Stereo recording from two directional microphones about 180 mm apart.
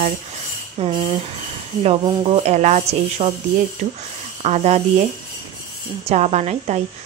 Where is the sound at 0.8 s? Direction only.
35° right (ahead or behind).